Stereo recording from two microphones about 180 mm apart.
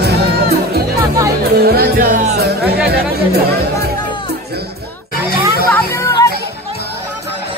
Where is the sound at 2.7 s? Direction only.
65° right (ahead or behind).